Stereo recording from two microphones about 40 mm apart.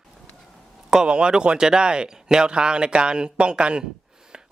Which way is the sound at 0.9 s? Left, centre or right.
Right.